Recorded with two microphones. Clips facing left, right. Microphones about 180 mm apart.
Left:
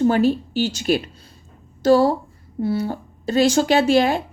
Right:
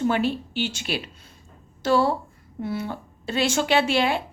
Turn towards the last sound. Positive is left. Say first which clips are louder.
# left 5 dB
turn(degrees=40)  # may be behind; listen again after turning